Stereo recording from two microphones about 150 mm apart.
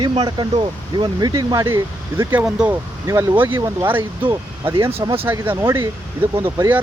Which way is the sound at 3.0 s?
20° right (ahead or behind).